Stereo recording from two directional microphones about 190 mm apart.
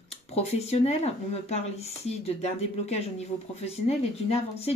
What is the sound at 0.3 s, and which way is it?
Speech, 35° left (ahead or behind).